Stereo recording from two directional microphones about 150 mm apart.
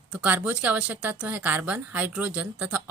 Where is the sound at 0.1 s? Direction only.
10° right (ahead or behind).